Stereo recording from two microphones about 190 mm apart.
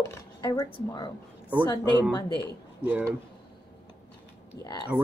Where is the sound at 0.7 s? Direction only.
20° left (ahead or behind).